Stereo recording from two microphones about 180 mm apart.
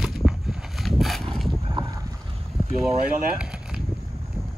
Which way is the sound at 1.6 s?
25° right (ahead or behind).